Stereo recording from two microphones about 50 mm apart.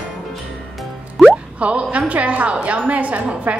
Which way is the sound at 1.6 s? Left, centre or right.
Right.